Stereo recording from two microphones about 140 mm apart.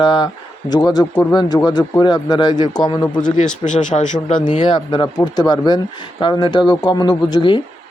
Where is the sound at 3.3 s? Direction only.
60° left (ahead or behind).